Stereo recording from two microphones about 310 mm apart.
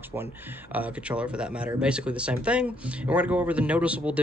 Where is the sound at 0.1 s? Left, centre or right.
Centre.